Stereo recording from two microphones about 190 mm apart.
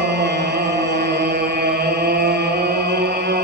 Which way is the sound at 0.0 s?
60° right (ahead or behind).